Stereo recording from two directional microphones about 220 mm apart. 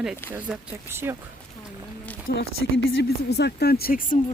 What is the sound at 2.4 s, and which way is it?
Speech, 60° left (ahead or behind).